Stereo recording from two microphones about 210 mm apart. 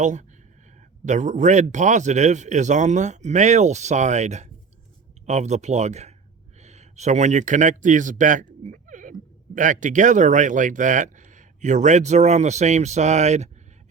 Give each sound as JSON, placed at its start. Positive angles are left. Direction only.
{"t": 0.0, "sound": "speech", "side_deg": -35}